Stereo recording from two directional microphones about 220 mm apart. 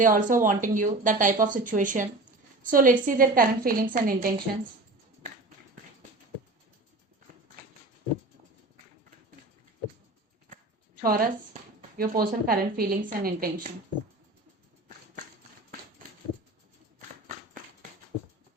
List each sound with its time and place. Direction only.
0.0 s a woman's voice: 35° right (ahead or behind)
11.0 s a woman's voice: 40° right (ahead or behind)